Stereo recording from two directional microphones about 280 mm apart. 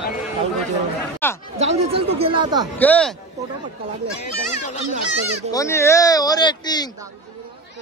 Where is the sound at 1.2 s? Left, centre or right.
Centre.